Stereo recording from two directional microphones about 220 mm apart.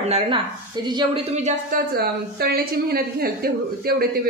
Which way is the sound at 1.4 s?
30° right (ahead or behind).